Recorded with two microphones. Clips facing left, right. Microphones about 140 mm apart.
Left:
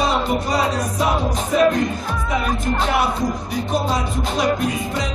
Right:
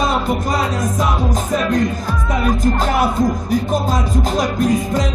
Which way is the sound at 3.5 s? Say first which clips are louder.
Right 4 dB; 45° right (ahead or behind).